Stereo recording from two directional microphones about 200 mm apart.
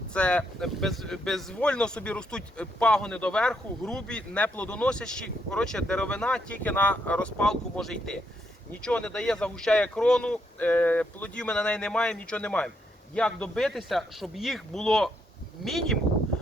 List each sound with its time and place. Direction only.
0.1 s speech: 5° left (ahead or behind)